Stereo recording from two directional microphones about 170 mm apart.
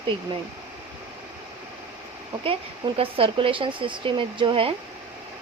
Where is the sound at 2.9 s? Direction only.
35° right (ahead or behind).